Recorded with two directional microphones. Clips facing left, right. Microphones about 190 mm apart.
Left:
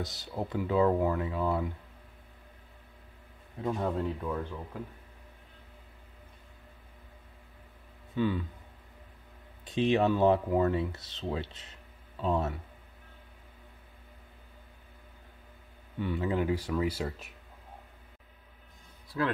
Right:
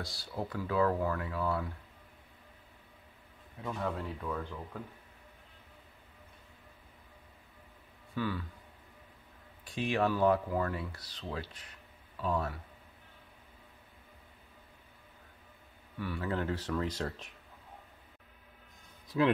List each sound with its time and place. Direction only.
0.0 s speech: 20° left (ahead or behind)
3.6 s speech: 20° left (ahead or behind)
8.1 s speech: 20° left (ahead or behind)
9.7 s speech: 20° left (ahead or behind)
16.0 s speech: 20° left (ahead or behind)
19.0 s speech: 20° right (ahead or behind)